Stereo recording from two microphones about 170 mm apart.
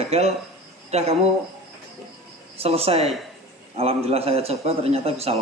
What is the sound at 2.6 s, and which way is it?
A man's voice, 35° right (ahead or behind).